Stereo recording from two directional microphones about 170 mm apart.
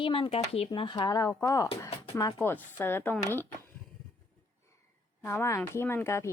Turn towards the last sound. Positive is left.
turn(degrees=15)  # may be behind; listen again after turning